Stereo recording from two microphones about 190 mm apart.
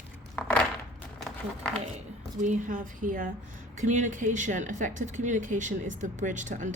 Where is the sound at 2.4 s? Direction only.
40° right (ahead or behind).